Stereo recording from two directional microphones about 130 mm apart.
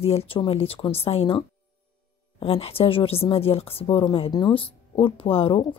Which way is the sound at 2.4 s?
45° left (ahead or behind).